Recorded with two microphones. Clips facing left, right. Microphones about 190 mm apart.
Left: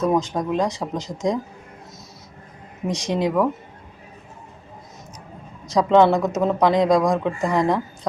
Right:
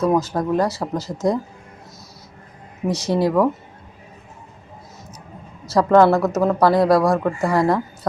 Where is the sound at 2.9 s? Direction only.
15° left (ahead or behind).